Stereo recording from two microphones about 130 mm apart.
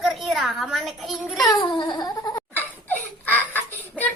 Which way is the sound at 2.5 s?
15° left (ahead or behind).